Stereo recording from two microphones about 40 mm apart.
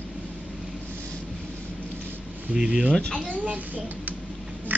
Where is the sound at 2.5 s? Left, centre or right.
Centre.